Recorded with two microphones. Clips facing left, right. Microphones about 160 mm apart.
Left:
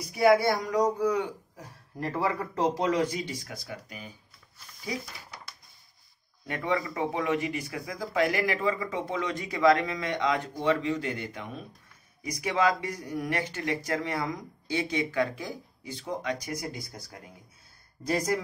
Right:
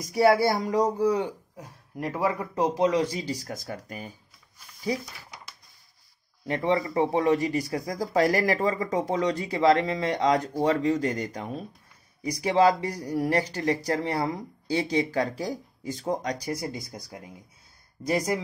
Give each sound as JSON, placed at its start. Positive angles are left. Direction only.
{"t": 0.0, "sound": "speech", "side_deg": -35}
{"t": 2.0, "sound": "speech", "side_deg": -15}
{"t": 6.4, "sound": "speech", "side_deg": -30}